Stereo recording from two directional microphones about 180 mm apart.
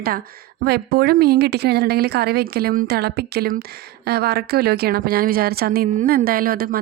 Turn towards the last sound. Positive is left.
turn(degrees=-55)  # may be behind; listen again after turning